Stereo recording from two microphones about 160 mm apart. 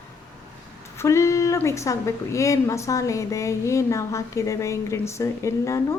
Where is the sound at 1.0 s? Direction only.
20° left (ahead or behind).